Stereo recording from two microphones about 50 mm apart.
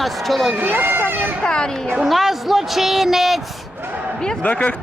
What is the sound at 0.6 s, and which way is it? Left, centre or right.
Speech, right.